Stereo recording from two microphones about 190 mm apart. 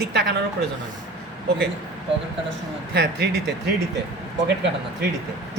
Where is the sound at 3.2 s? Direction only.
60° right (ahead or behind).